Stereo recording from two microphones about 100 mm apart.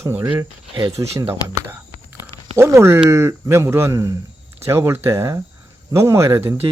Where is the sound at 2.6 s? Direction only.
25° right (ahead or behind).